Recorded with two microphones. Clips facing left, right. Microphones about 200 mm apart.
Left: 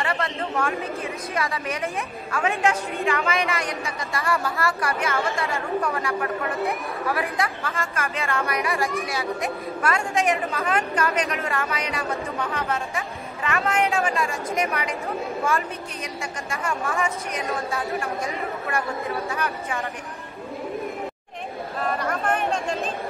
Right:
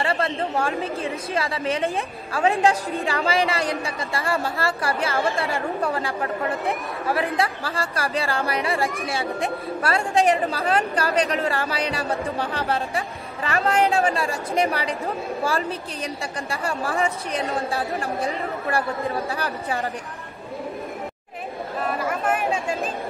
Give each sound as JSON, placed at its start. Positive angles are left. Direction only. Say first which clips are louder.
{"t": 0.0, "sound": "speech", "louder": "right 3 dB", "side_deg": -30}
{"t": 21.7, "sound": "chatter", "louder": "right 1 dB", "side_deg": -5}